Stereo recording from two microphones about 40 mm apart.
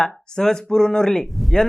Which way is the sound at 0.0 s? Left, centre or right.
Centre.